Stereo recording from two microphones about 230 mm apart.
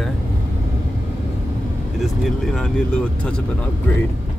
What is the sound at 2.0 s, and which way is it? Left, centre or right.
Speech, centre.